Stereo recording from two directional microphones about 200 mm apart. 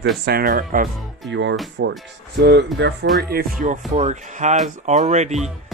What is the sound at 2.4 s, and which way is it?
Speech, 60° right (ahead or behind).